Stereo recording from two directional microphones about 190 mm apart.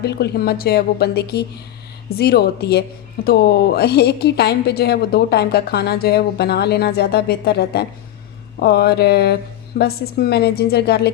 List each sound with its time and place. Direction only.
0.0 s a woman's voice: 55° left (ahead or behind)